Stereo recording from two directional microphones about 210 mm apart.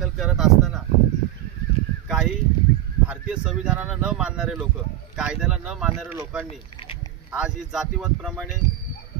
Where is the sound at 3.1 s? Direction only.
5° right (ahead or behind).